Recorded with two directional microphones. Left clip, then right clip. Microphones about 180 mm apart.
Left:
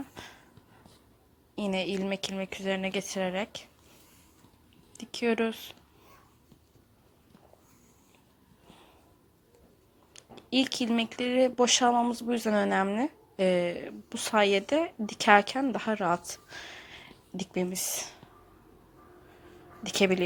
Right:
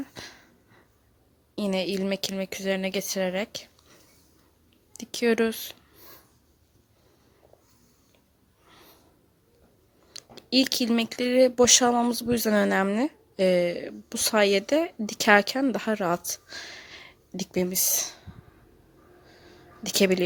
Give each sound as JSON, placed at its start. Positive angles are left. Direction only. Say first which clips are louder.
{"t": 0.0, "sound": "a sound", "louder": "right 4 dB", "side_deg": -35}
{"t": 1.5, "sound": "speech", "louder": "right 3 dB", "side_deg": -35}
{"t": 4.9, "sound": "speech", "louder": "right 5 dB", "side_deg": -35}
{"t": 10.1, "sound": "speech", "louder": "right 5 dB", "side_deg": -35}
{"t": 19.8, "sound": "speech", "louder": "right 3 dB", "side_deg": -35}